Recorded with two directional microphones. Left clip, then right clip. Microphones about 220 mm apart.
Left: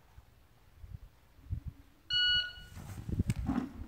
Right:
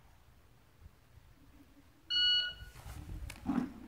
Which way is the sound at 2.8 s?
10° left (ahead or behind).